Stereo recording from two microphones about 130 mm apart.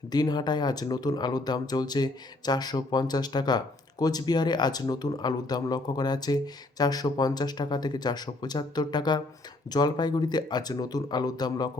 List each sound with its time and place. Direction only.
0.1 s speech: 30° left (ahead or behind)